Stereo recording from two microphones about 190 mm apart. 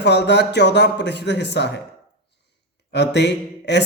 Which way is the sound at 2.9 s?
65° left (ahead or behind).